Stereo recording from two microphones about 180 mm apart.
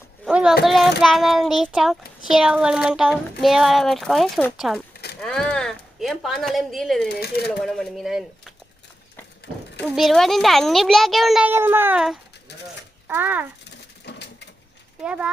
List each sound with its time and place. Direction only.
0.3 s a child's voice: 5° right (ahead or behind)
9.8 s a child's voice: centre (ahead or behind)
13.7 s a sound: 70° left (ahead or behind)
15.0 s speech: 5° right (ahead or behind)